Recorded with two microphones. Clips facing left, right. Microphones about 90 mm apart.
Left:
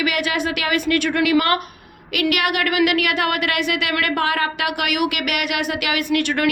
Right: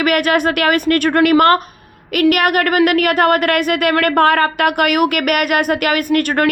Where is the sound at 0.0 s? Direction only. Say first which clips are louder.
Right 7 dB; 50° right (ahead or behind).